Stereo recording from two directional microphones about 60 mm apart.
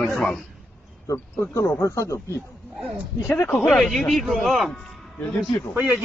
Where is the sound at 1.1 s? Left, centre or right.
Left.